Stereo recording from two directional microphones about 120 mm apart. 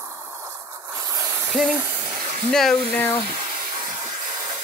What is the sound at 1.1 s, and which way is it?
Snake, 25° right (ahead or behind).